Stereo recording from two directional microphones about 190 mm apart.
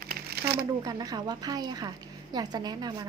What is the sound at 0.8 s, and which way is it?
A woman's voice, 20° right (ahead or behind).